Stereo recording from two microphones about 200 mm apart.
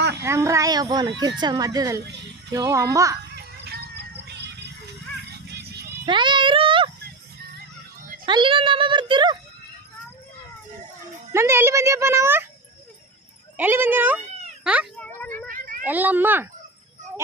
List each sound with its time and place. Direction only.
0.2 s a child's voice: 15° right (ahead or behind)
3.3 s music: 55° right (ahead or behind)
6.1 s a sound: 25° right (ahead or behind)
8.3 s speech: 25° right (ahead or behind)
11.3 s a child's voice: 15° right (ahead or behind)
13.6 s a child's voice: 10° right (ahead or behind)
14.9 s a sound: 5° left (ahead or behind)
15.4 s a sound: 45° right (ahead or behind)
15.8 s a child's voice: 10° right (ahead or behind)